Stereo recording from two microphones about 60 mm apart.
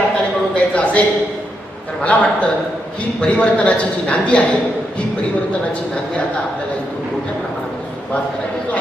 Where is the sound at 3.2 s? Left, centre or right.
Left.